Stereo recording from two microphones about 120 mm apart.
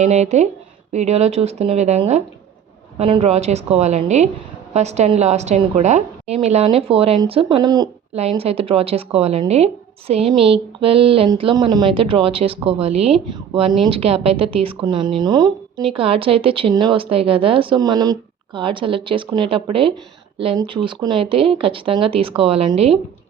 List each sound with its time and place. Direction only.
0.0 s speech: 70° right (ahead or behind)
3.0 s a woman's voice: 55° right (ahead or behind)
7.4 s speech: 35° right (ahead or behind)
8.1 s a woman's voice: 60° right (ahead or behind)
10.2 s speech: centre (ahead or behind)
10.5 s speech: 50° right (ahead or behind)
11.5 s speech: 35° right (ahead or behind)
11.9 s speech: 45° right (ahead or behind)
13.7 s speech: centre (ahead or behind)
13.9 s speech: 55° right (ahead or behind); by 15.5 s 35° right (ahead or behind)
16.0 s speech: 50° right (ahead or behind)
17.7 s speech: 35° right (ahead or behind); by 22.9 s 55° right (ahead or behind)